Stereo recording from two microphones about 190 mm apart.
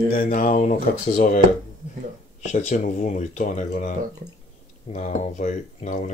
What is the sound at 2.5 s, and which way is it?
Speech, 40° left (ahead or behind).